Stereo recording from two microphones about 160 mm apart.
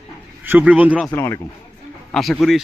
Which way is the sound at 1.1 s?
20° left (ahead or behind).